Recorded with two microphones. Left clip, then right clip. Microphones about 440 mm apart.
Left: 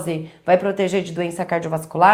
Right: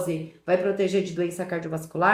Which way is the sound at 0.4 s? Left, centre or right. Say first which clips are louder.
Left 6 dB; left.